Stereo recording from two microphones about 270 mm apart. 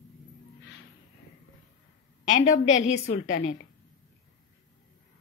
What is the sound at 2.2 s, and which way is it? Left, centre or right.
A woman's voice, left.